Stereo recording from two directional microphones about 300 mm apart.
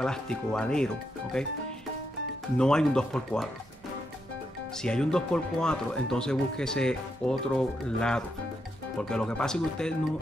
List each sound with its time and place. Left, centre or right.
0.0 s speech: centre
2.5 s speech: centre
4.8 s speech: centre